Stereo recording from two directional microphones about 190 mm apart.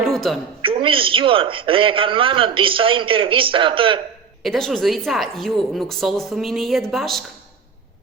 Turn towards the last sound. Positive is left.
turn(degrees=0)  # may be behind; listen again after turning